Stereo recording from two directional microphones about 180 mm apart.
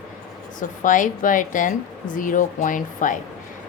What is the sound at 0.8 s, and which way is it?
A woman's voice, 45° left (ahead or behind).